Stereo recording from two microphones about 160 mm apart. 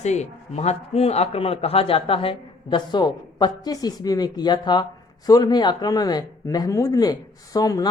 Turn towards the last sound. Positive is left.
turn(degrees=25)  # may be behind; listen again after turning